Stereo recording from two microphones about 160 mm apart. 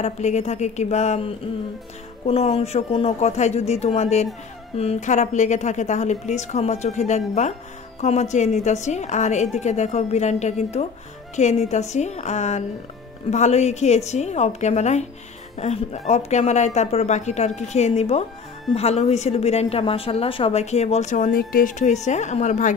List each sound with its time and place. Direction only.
0.0 s a woman's voice: 45° left (ahead or behind)